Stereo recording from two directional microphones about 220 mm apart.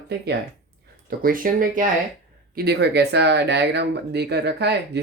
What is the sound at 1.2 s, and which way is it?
Speech, 40° right (ahead or behind).